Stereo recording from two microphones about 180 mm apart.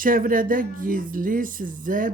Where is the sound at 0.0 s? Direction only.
50° right (ahead or behind).